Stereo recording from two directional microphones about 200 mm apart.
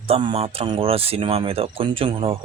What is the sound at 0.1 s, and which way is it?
Speech, 25° right (ahead or behind).